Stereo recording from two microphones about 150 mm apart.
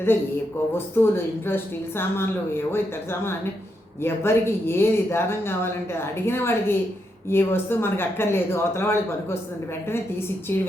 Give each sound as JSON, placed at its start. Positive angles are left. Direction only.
{"t": 0.9, "sound": "speech", "side_deg": 15}